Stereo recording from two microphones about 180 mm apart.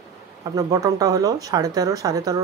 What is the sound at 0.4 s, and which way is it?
Speech, 20° right (ahead or behind).